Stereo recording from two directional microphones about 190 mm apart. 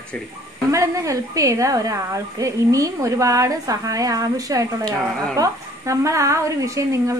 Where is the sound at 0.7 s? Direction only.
15° right (ahead or behind).